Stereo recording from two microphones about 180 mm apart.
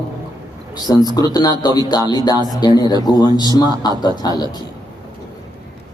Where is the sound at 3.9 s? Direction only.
20° right (ahead or behind).